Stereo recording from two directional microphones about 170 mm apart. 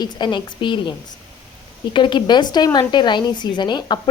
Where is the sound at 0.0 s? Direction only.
25° left (ahead or behind).